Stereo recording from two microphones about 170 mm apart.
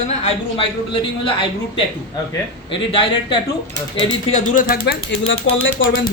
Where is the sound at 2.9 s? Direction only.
30° left (ahead or behind).